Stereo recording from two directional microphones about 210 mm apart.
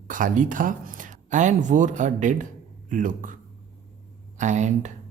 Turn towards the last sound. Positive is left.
turn(degrees=-35)  # may be behind; listen again after turning